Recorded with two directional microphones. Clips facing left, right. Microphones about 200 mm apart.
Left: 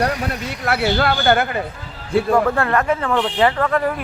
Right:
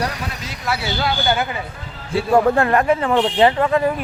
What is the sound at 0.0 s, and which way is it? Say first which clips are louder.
Speech: left 5 dB; 55° left (ahead or behind).